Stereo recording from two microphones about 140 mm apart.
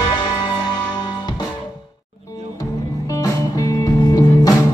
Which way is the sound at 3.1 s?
25° left (ahead or behind).